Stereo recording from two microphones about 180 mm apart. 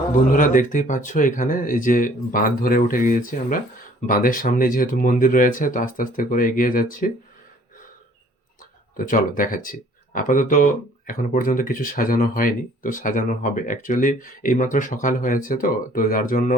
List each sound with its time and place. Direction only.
0.3 s speech: 50° left (ahead or behind)
9.0 s speech: 50° left (ahead or behind)